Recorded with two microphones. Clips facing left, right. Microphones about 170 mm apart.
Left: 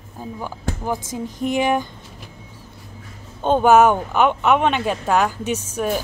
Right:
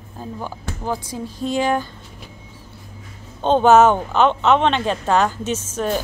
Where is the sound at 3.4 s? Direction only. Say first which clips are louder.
Right 1 dB; 10° left (ahead or behind).